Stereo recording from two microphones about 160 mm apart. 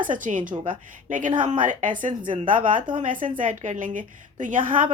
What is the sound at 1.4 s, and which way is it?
Speech, 55° right (ahead or behind).